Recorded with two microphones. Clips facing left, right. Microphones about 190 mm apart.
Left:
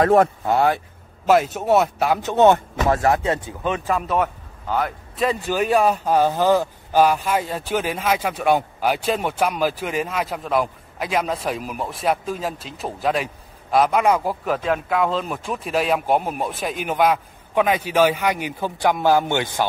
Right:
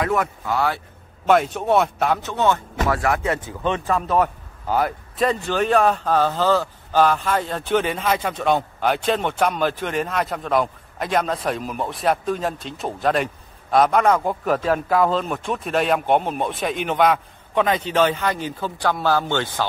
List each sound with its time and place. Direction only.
0.0 s speech: 30° left (ahead or behind)
1.2 s a man's voice: 5° left (ahead or behind)
2.2 s speech: 20° left (ahead or behind)
3.6 s speech: 15° left (ahead or behind)
3.9 s a man's voice: centre (ahead or behind)